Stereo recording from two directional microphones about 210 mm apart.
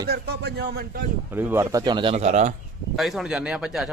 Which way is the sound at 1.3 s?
10° right (ahead or behind).